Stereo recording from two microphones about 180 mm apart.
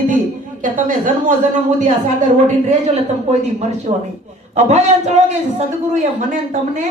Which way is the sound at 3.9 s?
35° right (ahead or behind).